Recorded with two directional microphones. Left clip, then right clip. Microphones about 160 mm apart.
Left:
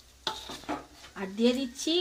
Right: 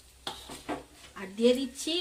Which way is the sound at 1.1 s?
20° left (ahead or behind).